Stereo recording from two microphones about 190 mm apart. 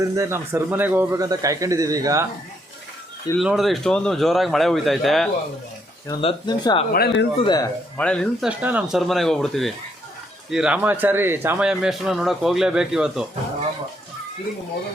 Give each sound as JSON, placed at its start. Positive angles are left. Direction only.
{"t": 0.0, "sound": "speech", "side_deg": -15}
{"t": 3.4, "sound": "a man's voice", "side_deg": 0}
{"t": 6.2, "sound": "speech", "side_deg": 20}
{"t": 6.9, "sound": "speech", "side_deg": 55}
{"t": 7.3, "sound": "speech", "side_deg": 20}
{"t": 7.9, "sound": "a man's voice", "side_deg": 5}
{"t": 8.4, "sound": "a man's voice", "side_deg": -5}